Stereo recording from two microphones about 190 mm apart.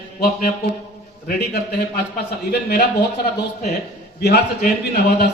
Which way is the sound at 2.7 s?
60° left (ahead or behind).